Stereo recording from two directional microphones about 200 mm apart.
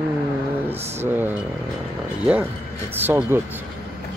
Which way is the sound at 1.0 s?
10° right (ahead or behind).